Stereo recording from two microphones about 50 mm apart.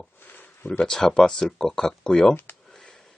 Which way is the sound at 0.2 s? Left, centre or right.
Left.